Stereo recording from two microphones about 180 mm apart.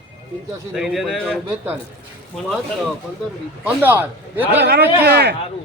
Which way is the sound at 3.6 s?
10° right (ahead or behind).